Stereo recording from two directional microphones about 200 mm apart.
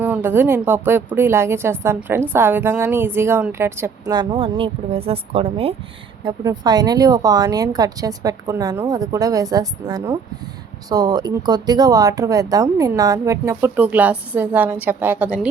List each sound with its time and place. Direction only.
0.0 s a woman's voice: 10° right (ahead or behind)